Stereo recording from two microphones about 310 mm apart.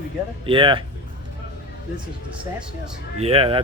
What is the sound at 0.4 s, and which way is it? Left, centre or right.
Speech, centre.